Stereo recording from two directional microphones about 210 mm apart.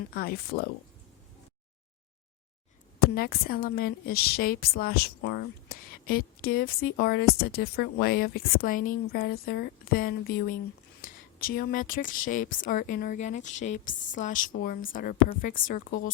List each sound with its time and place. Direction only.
0.1 s a woman's voice: 45° left (ahead or behind)
3.0 s a woman's voice: 45° left (ahead or behind)